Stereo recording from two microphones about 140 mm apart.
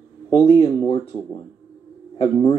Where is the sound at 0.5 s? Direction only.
40° left (ahead or behind).